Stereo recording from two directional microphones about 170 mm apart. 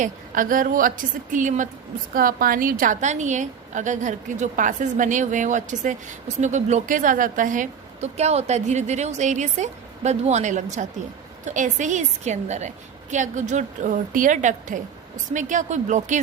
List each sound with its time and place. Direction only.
0.0 s a woman's voice: 50° right (ahead or behind)